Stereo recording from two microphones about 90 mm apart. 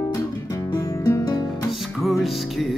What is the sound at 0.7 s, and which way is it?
Music, 40° left (ahead or behind).